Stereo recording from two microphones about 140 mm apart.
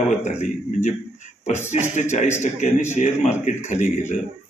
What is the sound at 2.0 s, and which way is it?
A man's voice, 60° left (ahead or behind).